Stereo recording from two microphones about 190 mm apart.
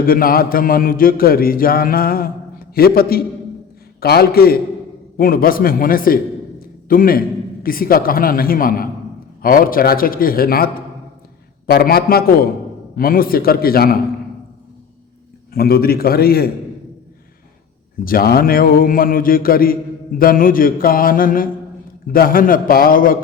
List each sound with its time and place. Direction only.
0.0 s a man's voice: 50° left (ahead or behind)
15.5 s speech: 55° left (ahead or behind)
18.0 s speech: 50° left (ahead or behind)